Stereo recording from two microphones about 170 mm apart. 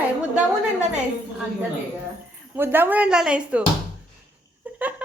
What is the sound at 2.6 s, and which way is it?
Speech, 10° right (ahead or behind).